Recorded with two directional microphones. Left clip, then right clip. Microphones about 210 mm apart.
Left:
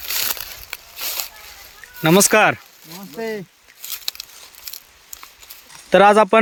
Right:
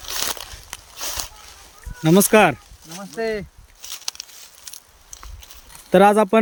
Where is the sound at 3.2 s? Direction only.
5° left (ahead or behind).